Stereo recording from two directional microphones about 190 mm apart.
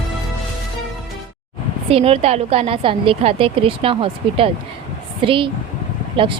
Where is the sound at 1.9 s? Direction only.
30° right (ahead or behind).